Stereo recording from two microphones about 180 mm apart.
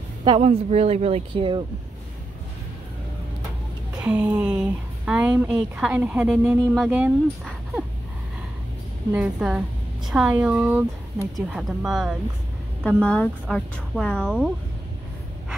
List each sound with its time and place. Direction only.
0.2 s speech: 30° right (ahead or behind)
4.0 s a woman's voice: 5° right (ahead or behind)
9.1 s a woman's voice: 5° right (ahead or behind)